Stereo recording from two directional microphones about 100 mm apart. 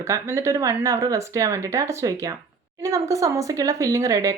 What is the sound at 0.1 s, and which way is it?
A woman's voice, 30° right (ahead or behind).